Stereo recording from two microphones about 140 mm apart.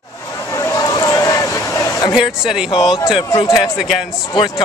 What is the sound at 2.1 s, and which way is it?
A man's voice, 5° right (ahead or behind).